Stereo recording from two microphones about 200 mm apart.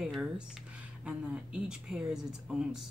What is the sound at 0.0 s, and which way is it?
Speech, centre (ahead or behind).